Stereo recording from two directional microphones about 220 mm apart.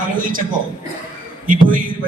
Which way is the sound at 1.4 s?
40° right (ahead or behind).